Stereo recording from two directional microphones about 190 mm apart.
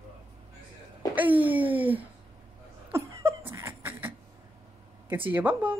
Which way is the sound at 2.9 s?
15° right (ahead or behind).